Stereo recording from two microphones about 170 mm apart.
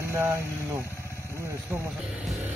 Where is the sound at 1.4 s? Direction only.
15° right (ahead or behind).